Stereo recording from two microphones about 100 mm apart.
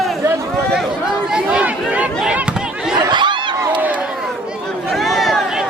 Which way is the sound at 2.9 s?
50° right (ahead or behind).